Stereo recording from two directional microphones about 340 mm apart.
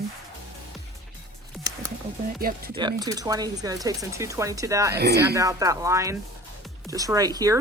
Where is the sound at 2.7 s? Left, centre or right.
Centre.